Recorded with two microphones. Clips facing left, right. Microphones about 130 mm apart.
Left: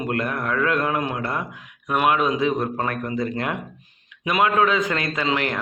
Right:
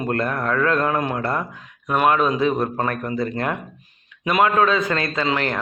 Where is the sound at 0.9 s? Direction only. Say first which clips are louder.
Right 3 dB; 40° right (ahead or behind).